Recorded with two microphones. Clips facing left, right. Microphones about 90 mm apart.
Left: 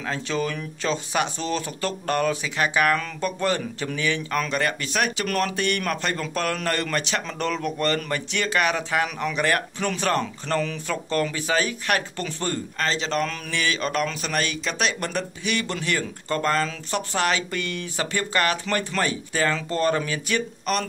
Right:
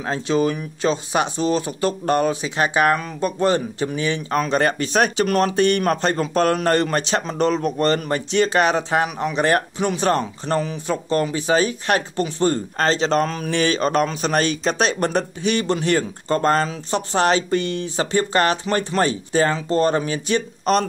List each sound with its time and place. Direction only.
0.0 s speech: 25° right (ahead or behind)